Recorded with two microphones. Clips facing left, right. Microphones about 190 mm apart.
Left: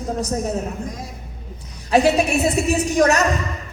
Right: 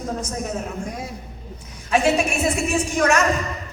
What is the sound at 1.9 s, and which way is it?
A man's voice, 35° left (ahead or behind).